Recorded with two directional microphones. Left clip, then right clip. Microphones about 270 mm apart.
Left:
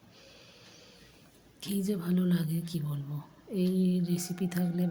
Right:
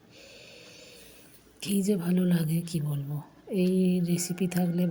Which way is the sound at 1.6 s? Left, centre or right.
Centre.